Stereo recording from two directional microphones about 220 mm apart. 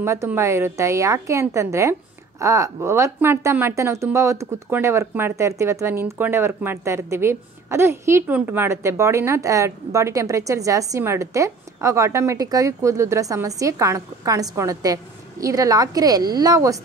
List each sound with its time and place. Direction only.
0.0 s a woman's voice: 10° right (ahead or behind)